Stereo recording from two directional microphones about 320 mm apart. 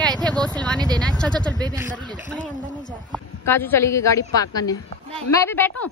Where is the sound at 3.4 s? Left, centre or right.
Centre.